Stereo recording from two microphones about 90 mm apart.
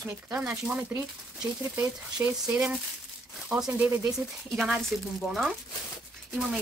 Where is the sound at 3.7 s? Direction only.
15° right (ahead or behind).